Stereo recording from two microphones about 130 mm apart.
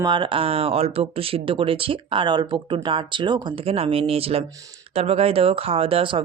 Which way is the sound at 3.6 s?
50° right (ahead or behind).